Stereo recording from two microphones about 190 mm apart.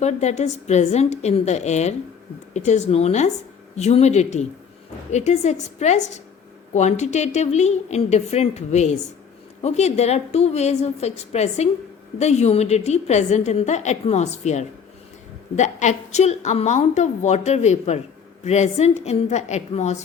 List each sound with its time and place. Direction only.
0.0 s a woman's voice: 35° left (ahead or behind)